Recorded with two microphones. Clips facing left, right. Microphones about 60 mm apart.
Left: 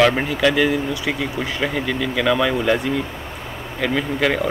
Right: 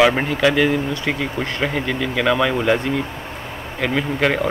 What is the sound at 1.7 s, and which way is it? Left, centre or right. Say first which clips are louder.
Speech: even; centre.